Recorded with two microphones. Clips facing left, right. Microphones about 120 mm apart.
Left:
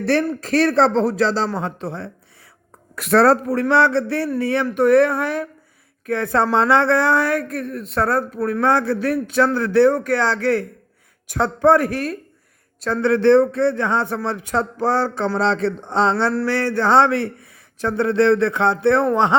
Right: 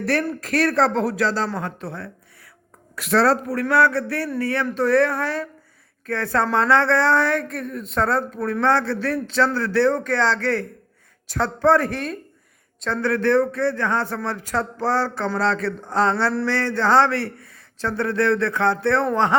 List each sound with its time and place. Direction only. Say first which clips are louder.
0.0 s speech: left 4 dB; 25° left (ahead or behind)
2.9 s speech: left 4 dB; 55° left (ahead or behind)
3.2 s speech: left 4 dB; 25° left (ahead or behind); by 12.1 s 10° left (ahead or behind)
13.0 s speech: left 5 dB; 25° left (ahead or behind)